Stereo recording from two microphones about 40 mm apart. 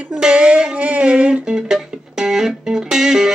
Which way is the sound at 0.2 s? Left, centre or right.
Right.